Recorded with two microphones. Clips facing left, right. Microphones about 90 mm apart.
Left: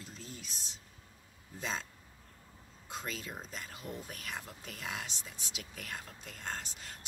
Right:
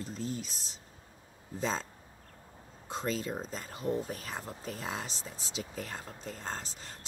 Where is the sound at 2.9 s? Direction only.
35° right (ahead or behind).